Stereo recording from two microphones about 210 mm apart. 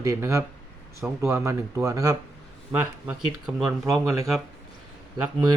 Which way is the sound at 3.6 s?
Centre (ahead or behind).